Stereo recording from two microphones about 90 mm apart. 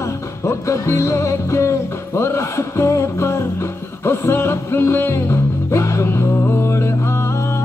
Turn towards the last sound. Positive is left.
turn(degrees=30)  # may be behind; listen again after turning